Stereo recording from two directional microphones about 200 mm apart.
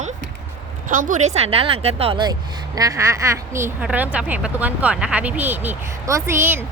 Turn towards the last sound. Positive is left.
turn(degrees=-10)  # may be behind; listen again after turning